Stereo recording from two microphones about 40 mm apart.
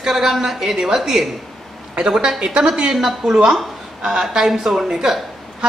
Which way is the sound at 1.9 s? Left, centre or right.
Centre.